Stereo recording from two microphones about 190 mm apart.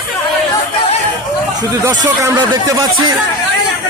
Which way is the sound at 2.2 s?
20° right (ahead or behind).